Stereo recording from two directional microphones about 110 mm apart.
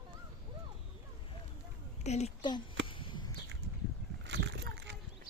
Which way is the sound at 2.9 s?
50° left (ahead or behind).